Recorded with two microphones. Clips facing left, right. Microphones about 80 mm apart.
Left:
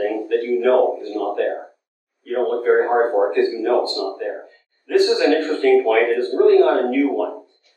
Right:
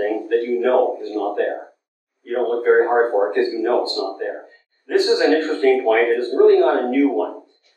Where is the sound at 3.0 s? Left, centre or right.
Centre.